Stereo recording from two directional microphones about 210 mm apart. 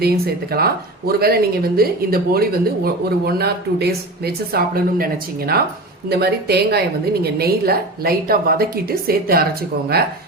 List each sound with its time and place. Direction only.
0.0 s speech: 50° right (ahead or behind)